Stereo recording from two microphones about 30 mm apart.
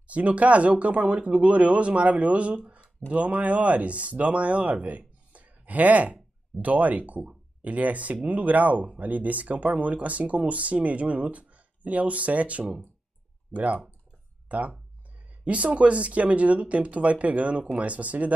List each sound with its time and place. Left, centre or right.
0.0 s speech: right
13.5 s speech: centre
14.5 s speech: right